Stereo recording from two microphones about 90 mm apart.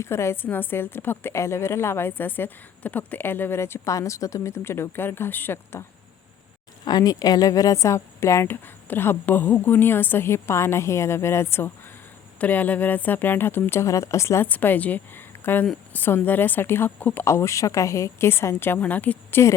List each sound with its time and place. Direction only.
0.0 s a woman's voice: 30° left (ahead or behind)
6.8 s a woman's voice: 45° left (ahead or behind)
14.4 s a woman's voice: 20° left (ahead or behind)
17.2 s a woman's voice: 30° left (ahead or behind)